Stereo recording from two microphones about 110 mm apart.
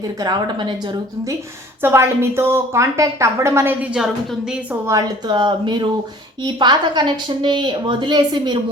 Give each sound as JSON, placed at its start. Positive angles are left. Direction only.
{"t": 0.2, "sound": "a woman's voice", "side_deg": -40}
{"t": 1.8, "sound": "a woman's voice", "side_deg": -25}
{"t": 3.9, "sound": "speech", "side_deg": -5}
{"t": 4.9, "sound": "a woman's voice", "side_deg": -35}